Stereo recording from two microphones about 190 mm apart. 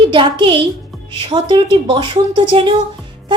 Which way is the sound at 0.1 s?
25° right (ahead or behind).